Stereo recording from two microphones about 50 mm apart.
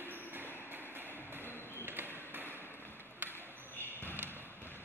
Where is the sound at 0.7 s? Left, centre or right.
Right.